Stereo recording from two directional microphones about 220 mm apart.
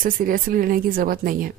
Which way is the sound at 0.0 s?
40° right (ahead or behind).